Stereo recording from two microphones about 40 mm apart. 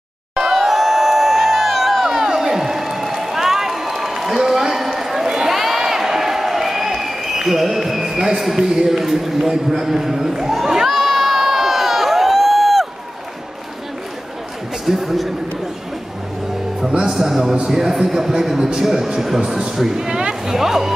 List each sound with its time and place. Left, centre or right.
0.4 s crowd: centre
14.9 s speech: centre
17.1 s speech: centre
19.4 s speech: right
19.7 s speech: centre
20.1 s a sound: centre
20.5 s speech: centre